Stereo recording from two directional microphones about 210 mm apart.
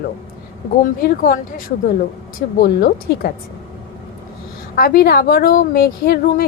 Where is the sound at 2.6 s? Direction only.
45° left (ahead or behind).